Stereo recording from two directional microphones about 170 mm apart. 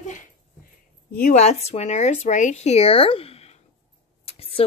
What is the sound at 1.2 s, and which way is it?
Speech, 40° left (ahead or behind).